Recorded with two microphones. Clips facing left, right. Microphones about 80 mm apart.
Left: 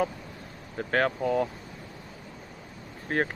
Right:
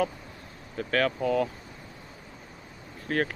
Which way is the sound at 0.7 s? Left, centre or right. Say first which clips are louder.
Even; left.